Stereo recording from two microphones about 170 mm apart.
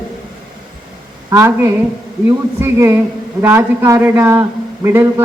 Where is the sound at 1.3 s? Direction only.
15° right (ahead or behind).